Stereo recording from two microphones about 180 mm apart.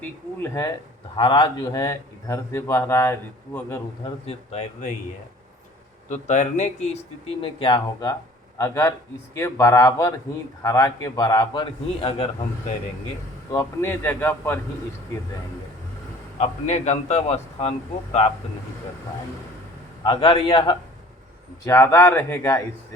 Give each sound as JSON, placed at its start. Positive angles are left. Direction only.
{"t": 1.1, "sound": "a man's voice", "side_deg": 25}
{"t": 4.0, "sound": "speech", "side_deg": 35}
{"t": 6.1, "sound": "speech", "side_deg": 40}
{"t": 7.4, "sound": "a man's voice", "side_deg": 25}
{"t": 8.5, "sound": "a man's voice", "side_deg": 15}
{"t": 13.5, "sound": "a man's voice", "side_deg": 15}
{"t": 16.4, "sound": "speech", "side_deg": 40}
{"t": 20.1, "sound": "a man's voice", "side_deg": 30}
{"t": 21.6, "sound": "a man's voice", "side_deg": 15}